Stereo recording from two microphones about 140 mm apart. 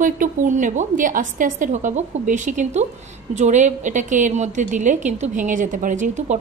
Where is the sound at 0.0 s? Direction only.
70° right (ahead or behind).